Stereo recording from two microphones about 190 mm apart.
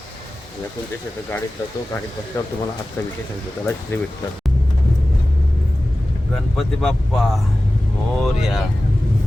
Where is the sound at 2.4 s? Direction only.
15° left (ahead or behind).